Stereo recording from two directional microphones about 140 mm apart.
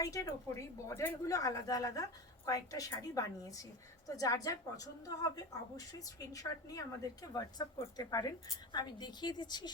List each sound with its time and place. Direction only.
0.0 s a woman's voice: 25° left (ahead or behind)